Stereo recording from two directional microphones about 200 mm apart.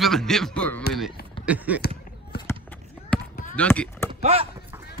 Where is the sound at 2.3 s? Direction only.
55° left (ahead or behind).